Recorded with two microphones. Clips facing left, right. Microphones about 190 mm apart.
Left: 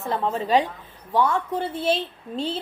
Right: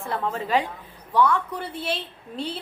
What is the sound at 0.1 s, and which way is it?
A woman's voice, 25° left (ahead or behind).